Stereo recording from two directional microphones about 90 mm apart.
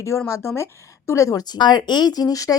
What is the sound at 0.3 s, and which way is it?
Speech, 30° left (ahead or behind).